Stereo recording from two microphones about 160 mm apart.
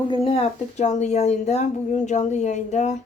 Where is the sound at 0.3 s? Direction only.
40° left (ahead or behind).